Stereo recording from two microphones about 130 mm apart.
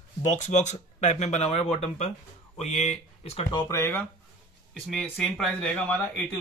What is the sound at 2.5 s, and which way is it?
Speech, 60° left (ahead or behind).